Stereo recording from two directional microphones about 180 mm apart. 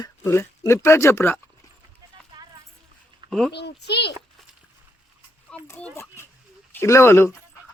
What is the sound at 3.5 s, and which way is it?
Speech, 65° left (ahead or behind).